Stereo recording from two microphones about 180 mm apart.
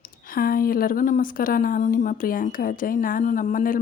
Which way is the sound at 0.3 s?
55° left (ahead or behind).